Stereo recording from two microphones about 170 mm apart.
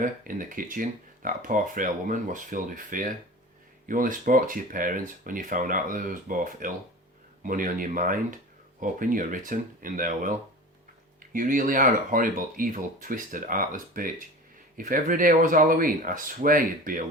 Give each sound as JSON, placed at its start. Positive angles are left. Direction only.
{"t": 0.0, "sound": "speech", "side_deg": -55}